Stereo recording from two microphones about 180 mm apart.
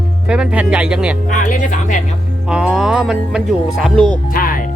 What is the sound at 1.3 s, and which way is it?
Speech, 45° left (ahead or behind).